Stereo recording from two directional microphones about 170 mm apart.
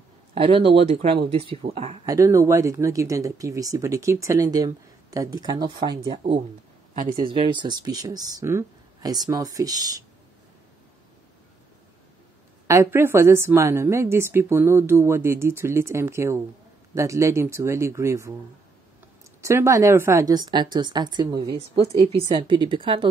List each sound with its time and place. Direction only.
0.3 s speech: 30° right (ahead or behind)
2.0 s speech: 20° right (ahead or behind)
6.9 s speech: 55° right (ahead or behind)
7.2 s speech: 30° right (ahead or behind)
12.6 s a woman's voice: 15° right (ahead or behind)
19.4 s speech: 15° right (ahead or behind)
21.7 s speech: 40° right (ahead or behind)
22.4 s speech: 25° right (ahead or behind)